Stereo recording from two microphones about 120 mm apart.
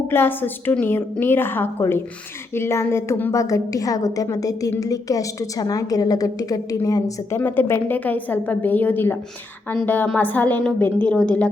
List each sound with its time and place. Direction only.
0.1 s a woman's voice: 20° left (ahead or behind)
7.3 s a woman's voice: 20° left (ahead or behind)